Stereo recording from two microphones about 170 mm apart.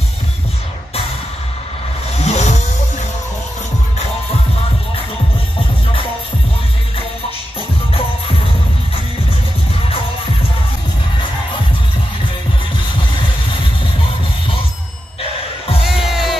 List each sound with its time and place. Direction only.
2.1 s vehicle: 40° left (ahead or behind)
15.8 s music: centre (ahead or behind)